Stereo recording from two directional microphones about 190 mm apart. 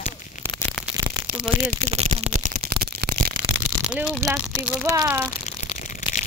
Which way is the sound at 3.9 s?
5° right (ahead or behind).